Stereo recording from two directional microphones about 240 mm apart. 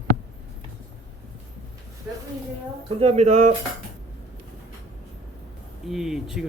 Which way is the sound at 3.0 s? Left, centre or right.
Right.